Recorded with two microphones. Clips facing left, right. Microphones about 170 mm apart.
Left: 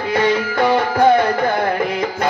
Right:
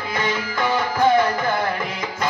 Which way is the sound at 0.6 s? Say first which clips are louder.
Left 5 dB; 60° left (ahead or behind).